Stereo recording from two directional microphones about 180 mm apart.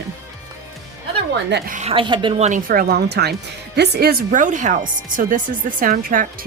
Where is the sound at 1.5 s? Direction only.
70° right (ahead or behind).